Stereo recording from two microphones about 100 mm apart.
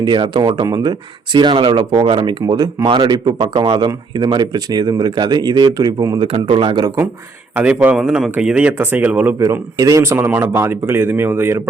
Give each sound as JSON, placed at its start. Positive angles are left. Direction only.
{"t": 0.0, "sound": "speech", "side_deg": -50}
{"t": 6.1, "sound": "speech", "side_deg": -60}
{"t": 7.5, "sound": "speech", "side_deg": -15}
{"t": 9.4, "sound": "a man's voice", "side_deg": -35}